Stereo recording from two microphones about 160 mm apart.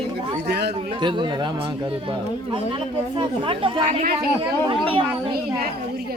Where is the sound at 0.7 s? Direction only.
30° right (ahead or behind).